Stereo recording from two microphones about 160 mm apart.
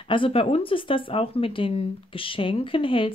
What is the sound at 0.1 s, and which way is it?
Speech, 35° left (ahead or behind).